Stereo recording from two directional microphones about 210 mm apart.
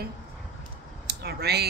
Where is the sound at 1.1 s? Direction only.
50° right (ahead or behind).